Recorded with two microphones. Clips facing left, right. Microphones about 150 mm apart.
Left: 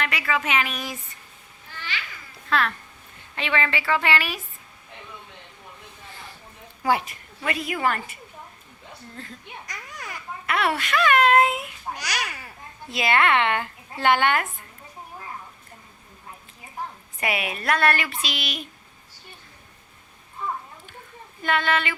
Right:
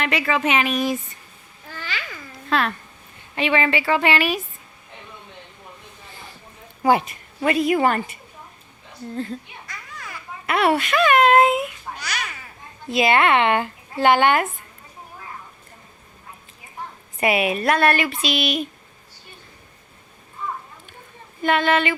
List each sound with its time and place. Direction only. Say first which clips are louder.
0.0 s speech: right 5 dB; 25° right (ahead or behind)
2.5 s a child's voice: right 2 dB; 20° right (ahead or behind)
6.8 s speech: right 5 dB; 25° right (ahead or behind)
10.4 s speech: right 6 dB; 25° right (ahead or behind)
11.9 s babbling: left 1 dB; 25° left (ahead or behind)
12.9 s speech: right 4 dB; 20° right (ahead or behind)
17.2 s speech: right 8 dB; 20° right (ahead or behind)
21.4 s speech: right 5 dB; 20° right (ahead or behind)